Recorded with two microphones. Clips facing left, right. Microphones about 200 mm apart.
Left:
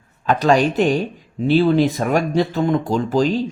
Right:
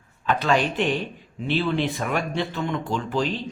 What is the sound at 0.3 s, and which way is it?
Speech, 40° left (ahead or behind).